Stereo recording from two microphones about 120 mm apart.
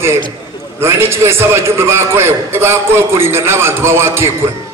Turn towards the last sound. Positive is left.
turn(degrees=-20)  # may be behind; listen again after turning